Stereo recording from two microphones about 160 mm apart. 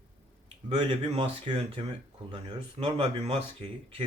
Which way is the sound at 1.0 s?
35° right (ahead or behind).